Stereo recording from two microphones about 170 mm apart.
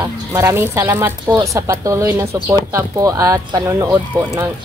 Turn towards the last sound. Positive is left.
turn(degrees=-20)  # may be behind; listen again after turning